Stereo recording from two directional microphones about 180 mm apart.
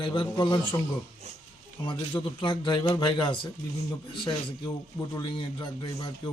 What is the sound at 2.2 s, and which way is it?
Speech, 25° left (ahead or behind).